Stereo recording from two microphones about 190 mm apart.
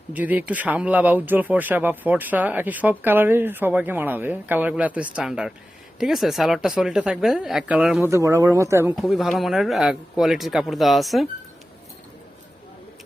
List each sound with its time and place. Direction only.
0.1 s speech: 10° right (ahead or behind)
8.1 s speech: 15° right (ahead or behind)
9.0 s speech: centre (ahead or behind)